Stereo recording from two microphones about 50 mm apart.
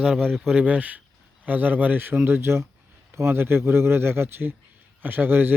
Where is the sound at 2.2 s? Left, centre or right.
Right.